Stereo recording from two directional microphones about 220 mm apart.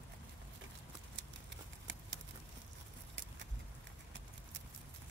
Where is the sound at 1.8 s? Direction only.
55° right (ahead or behind).